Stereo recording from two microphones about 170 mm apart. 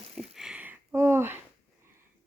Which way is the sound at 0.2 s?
5° right (ahead or behind).